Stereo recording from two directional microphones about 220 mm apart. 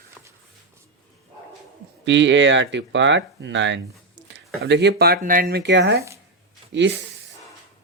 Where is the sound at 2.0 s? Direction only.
55° right (ahead or behind).